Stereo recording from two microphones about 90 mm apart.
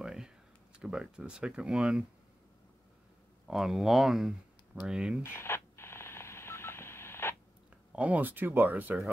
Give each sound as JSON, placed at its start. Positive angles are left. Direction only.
{"t": 0.0, "sound": "a sound", "side_deg": -5}
{"t": 0.7, "sound": "speech", "side_deg": -10}
{"t": 3.4, "sound": "speech", "side_deg": -5}
{"t": 5.2, "sound": "telephone dialing", "side_deg": 25}
{"t": 7.9, "sound": "speech", "side_deg": -15}